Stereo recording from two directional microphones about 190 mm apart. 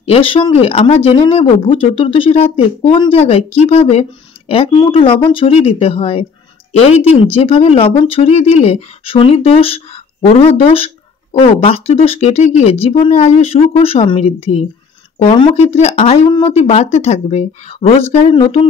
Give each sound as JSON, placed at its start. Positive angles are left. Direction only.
{"t": 0.0, "sound": "speech", "side_deg": 30}